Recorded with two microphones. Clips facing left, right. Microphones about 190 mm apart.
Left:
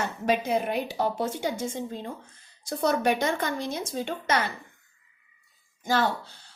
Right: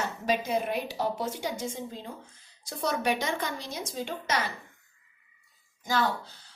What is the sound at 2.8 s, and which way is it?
Speech, 50° left (ahead or behind).